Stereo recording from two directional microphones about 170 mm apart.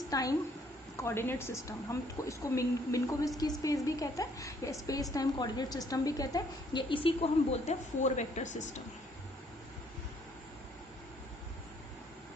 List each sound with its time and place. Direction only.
0.1 s a woman's voice: 20° left (ahead or behind); by 8.8 s 45° left (ahead or behind)